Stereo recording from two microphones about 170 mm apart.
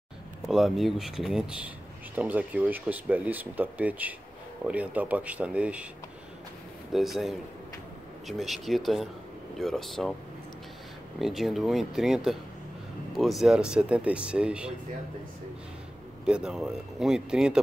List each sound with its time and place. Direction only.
0.5 s speech: centre (ahead or behind)
6.9 s speech: centre (ahead or behind)
11.1 s speech: centre (ahead or behind)
16.3 s speech: 5° right (ahead or behind)